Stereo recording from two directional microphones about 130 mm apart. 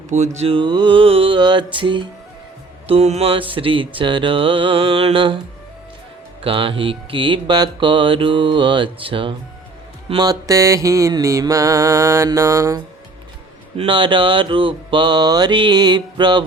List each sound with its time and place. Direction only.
0.1 s music: 60° right (ahead or behind); by 2.0 s 40° right (ahead or behind)
2.8 s mantra: 50° right (ahead or behind)
6.4 s music: 45° right (ahead or behind)
10.2 s mantra: 30° right (ahead or behind)
13.7 s music: 40° right (ahead or behind)